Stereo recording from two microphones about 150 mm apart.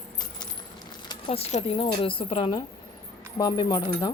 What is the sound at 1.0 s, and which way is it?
A woman's voice, 35° left (ahead or behind).